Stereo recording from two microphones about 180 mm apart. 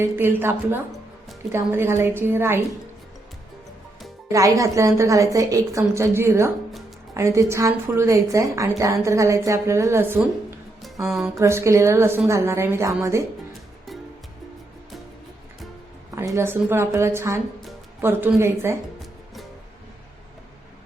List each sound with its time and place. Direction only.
0.0 s a woman's voice: 10° right (ahead or behind)
4.3 s a woman's voice: 20° right (ahead or behind)
11.3 s a woman's voice: 15° right (ahead or behind)
16.1 s a woman's voice: 15° right (ahead or behind)